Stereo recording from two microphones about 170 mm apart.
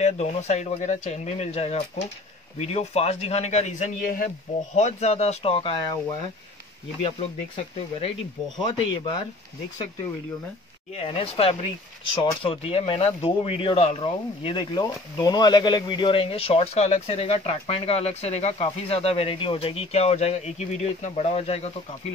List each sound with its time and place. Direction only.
0.0 s speech: 40° left (ahead or behind)
4.7 s speech: 40° left (ahead or behind)
11.1 s speech: 35° left (ahead or behind)